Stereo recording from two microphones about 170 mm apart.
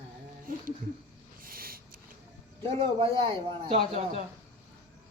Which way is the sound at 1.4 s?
60° right (ahead or behind).